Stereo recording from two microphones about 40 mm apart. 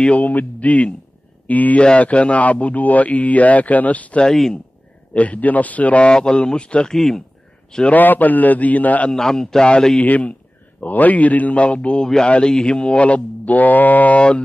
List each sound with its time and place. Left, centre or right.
0.0 s a man's voice: left
1.8 s a man's voice: left
4.3 s a man's voice: centre
5.1 s a man's voice: left
6.0 s speech: left
6.9 s a man's voice: centre
7.9 s speech: left
9.1 s a man's voice: centre
10.0 s a man's voice: left; by 12.8 s centre
12.8 s speech: left